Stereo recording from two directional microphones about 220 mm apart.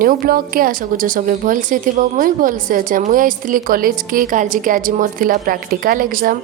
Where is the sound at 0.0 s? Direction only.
40° right (ahead or behind).